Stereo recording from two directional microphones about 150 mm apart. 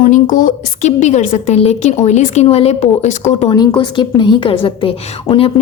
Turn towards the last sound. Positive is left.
turn(degrees=40)  # may be behind; listen again after turning